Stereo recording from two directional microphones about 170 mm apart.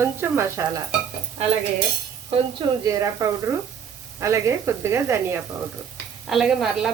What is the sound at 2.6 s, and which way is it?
A woman's voice, 20° right (ahead or behind).